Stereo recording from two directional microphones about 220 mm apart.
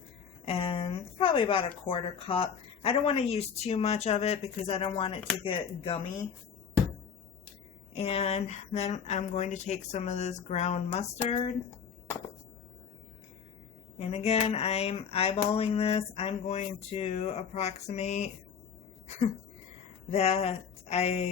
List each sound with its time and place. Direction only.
0.4 s a sound: 25° left (ahead or behind)
1.9 s speech: 25° left (ahead or behind)
7.9 s speech: 25° left (ahead or behind)
14.0 s speech: 30° left (ahead or behind)
20.1 s speech: 30° left (ahead or behind)